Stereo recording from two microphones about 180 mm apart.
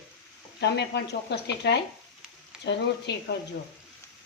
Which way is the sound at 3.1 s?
70° left (ahead or behind).